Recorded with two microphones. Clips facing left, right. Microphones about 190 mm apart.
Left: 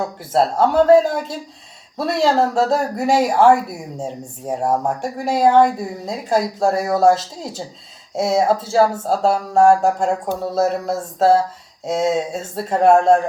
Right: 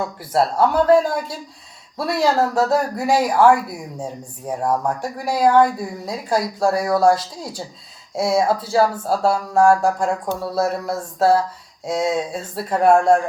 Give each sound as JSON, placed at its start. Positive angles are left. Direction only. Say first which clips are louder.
{"t": 0.6, "sound": "speech", "louder": "left 3 dB", "side_deg": 25}